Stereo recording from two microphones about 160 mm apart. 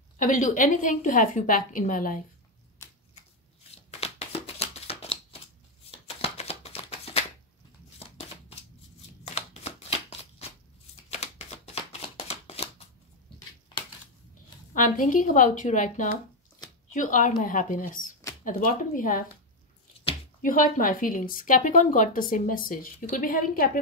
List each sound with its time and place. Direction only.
0.2 s a woman's voice: 55° left (ahead or behind)
3.9 s shuffling cards: 40° left (ahead or behind)
9.2 s shuffling cards: 45° left (ahead or behind)
14.7 s a woman's voice: 55° left (ahead or behind)
20.4 s a woman's voice: 60° left (ahead or behind)